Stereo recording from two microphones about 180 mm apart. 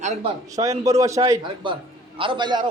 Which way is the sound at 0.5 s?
20° right (ahead or behind).